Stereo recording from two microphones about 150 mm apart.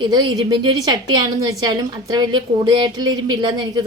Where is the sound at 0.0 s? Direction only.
30° right (ahead or behind).